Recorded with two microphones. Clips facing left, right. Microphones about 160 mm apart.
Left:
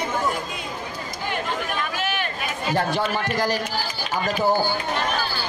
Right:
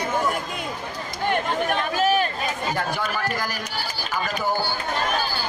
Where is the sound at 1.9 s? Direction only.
35° right (ahead or behind).